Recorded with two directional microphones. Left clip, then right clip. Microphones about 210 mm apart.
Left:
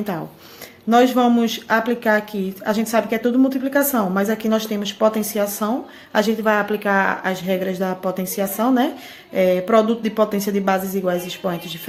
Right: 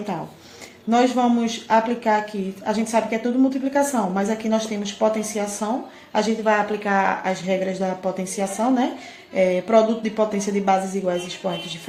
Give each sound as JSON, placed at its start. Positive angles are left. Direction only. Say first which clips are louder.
{"t": 0.9, "sound": "speech", "louder": "left 4 dB", "side_deg": 45}